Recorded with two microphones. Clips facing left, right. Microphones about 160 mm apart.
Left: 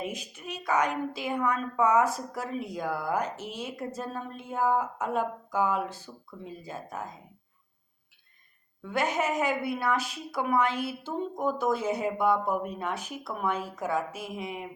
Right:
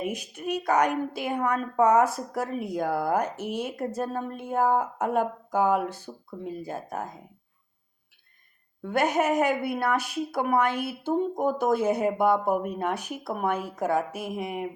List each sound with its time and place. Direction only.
0.0 s speech: 60° right (ahead or behind); by 2.0 s 45° right (ahead or behind)
2.0 s speech: 65° right (ahead or behind)
8.8 s speech: 55° right (ahead or behind)